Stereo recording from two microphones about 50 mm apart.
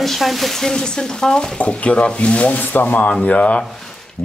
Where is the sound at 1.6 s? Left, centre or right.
Left.